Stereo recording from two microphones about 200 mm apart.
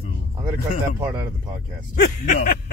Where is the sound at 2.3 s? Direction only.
45° left (ahead or behind).